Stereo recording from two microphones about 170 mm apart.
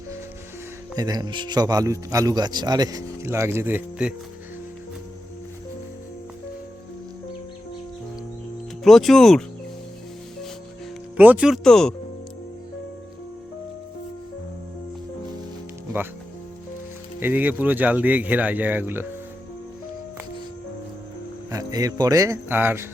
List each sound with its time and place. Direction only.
0.9 s speech: 25° right (ahead or behind)
8.8 s speech: centre (ahead or behind)
11.2 s speech: 10° right (ahead or behind)
15.9 s speech: 10° right (ahead or behind)
17.2 s speech: 10° right (ahead or behind)
21.5 s speech: 20° right (ahead or behind)